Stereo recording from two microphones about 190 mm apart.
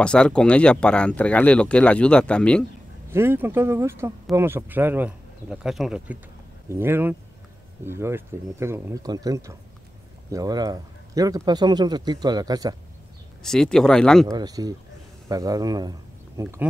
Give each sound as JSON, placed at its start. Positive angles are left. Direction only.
{"t": 0.0, "sound": "speech", "side_deg": 5}
{"t": 3.1, "sound": "a man's voice", "side_deg": -10}
{"t": 13.4, "sound": "speech", "side_deg": 5}
{"t": 14.2, "sound": "a man's voice", "side_deg": -20}